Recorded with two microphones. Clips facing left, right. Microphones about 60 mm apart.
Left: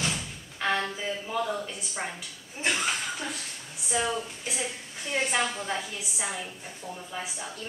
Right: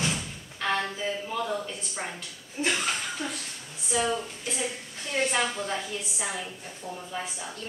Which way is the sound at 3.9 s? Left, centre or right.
Centre.